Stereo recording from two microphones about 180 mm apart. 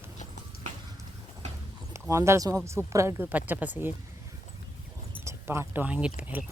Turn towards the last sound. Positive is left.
turn(degrees=-10)  # may be behind; listen again after turning